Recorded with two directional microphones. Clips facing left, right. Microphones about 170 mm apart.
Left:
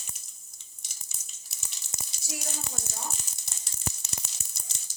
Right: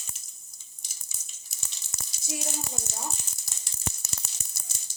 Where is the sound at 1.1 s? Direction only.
Centre (ahead or behind).